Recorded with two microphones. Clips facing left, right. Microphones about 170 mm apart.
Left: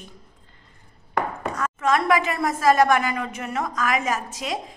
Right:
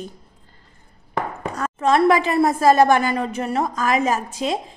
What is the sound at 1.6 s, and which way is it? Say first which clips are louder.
A woman's voice: right 5 dB; 35° right (ahead or behind).